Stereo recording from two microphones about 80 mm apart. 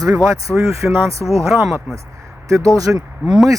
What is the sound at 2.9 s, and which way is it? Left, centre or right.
Speech, centre.